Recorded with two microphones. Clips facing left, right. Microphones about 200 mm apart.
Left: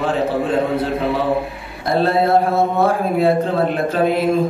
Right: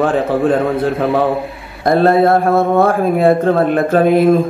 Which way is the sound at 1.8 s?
50° right (ahead or behind).